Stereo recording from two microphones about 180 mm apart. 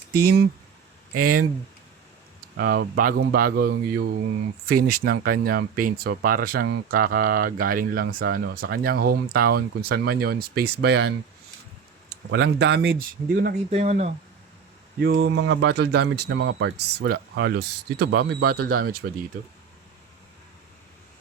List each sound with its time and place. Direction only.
0.1 s speech: 60° right (ahead or behind)
2.6 s speech: 60° right (ahead or behind)
12.3 s speech: 60° right (ahead or behind)
13.7 s speech: 35° right (ahead or behind)
15.0 s speech: 65° right (ahead or behind)